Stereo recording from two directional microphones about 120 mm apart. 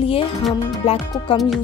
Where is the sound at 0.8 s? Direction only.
55° left (ahead or behind).